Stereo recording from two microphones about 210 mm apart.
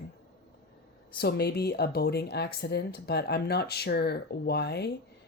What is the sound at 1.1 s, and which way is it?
Speech, 50° left (ahead or behind).